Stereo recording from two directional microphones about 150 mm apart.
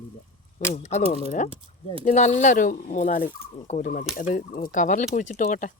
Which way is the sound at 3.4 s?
45° left (ahead or behind).